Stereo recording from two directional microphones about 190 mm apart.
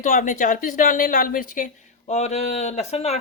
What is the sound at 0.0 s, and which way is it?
A woman's voice, 45° left (ahead or behind).